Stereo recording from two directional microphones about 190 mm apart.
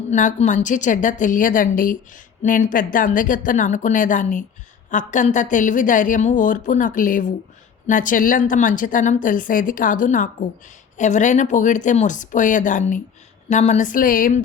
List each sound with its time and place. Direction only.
0.1 s a woman's voice: 40° left (ahead or behind)